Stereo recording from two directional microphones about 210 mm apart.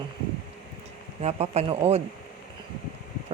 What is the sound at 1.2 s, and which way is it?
Speech, 30° right (ahead or behind).